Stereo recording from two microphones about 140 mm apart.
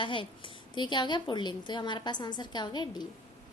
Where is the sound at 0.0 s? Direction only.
35° left (ahead or behind).